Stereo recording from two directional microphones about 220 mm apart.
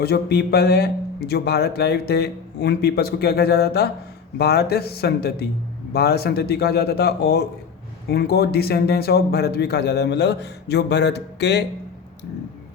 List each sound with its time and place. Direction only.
0.0 s a man's voice: 45° left (ahead or behind)